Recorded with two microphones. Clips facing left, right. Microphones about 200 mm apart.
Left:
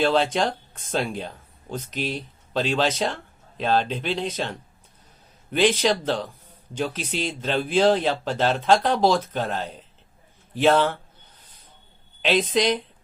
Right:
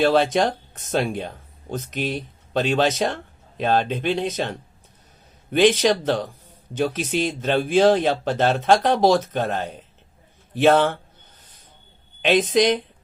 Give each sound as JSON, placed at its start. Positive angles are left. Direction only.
{"t": 0.0, "sound": "speech", "side_deg": -50}
{"t": 5.5, "sound": "speech", "side_deg": -50}
{"t": 12.3, "sound": "speech", "side_deg": -50}